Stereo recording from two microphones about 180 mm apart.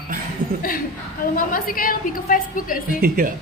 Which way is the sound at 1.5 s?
50° left (ahead or behind).